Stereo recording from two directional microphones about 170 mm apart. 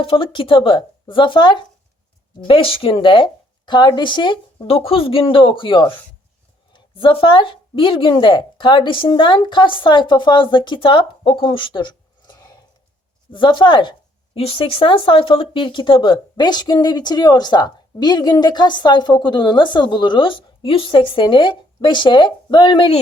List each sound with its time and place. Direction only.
0.0 s speech: 30° left (ahead or behind)